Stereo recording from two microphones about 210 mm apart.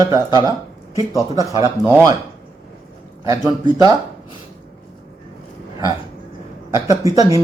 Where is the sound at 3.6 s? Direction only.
15° right (ahead or behind).